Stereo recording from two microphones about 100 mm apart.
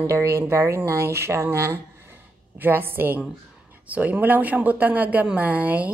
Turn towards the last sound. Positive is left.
turn(degrees=-15)  # may be behind; listen again after turning